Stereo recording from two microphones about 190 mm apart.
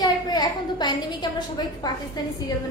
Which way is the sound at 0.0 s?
20° left (ahead or behind).